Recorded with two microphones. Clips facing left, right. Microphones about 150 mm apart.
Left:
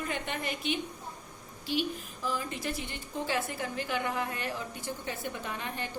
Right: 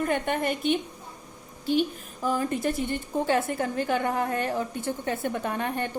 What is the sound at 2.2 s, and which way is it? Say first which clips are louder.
A woman's voice: right 10 dB; 50° right (ahead or behind).